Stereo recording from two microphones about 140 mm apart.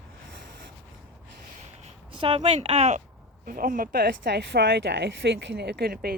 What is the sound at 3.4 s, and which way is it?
Speech, 85° right.